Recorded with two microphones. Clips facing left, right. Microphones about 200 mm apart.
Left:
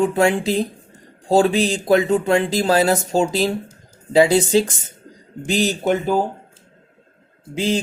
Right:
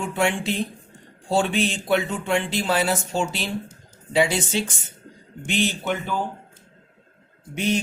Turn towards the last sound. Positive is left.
turn(degrees=30)  # may be behind; listen again after turning